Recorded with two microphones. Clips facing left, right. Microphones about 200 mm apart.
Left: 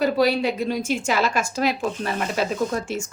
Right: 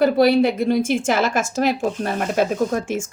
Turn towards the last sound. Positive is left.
turn(degrees=-50)  # may be behind; listen again after turning